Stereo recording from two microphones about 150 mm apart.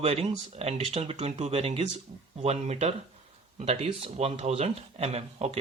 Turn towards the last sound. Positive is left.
turn(degrees=-45)  # may be behind; listen again after turning